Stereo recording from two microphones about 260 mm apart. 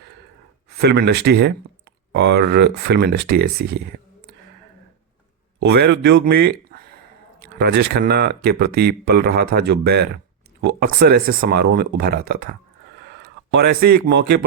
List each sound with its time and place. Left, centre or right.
0.8 s speech: right
5.6 s speech: right